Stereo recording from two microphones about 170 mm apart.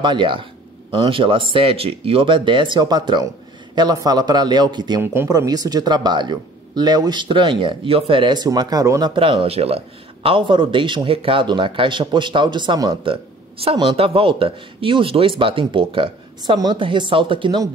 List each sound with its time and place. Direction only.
0.0 s speech: 30° right (ahead or behind)
5.0 s speech: 15° right (ahead or behind)
9.1 s speech: 30° right (ahead or behind)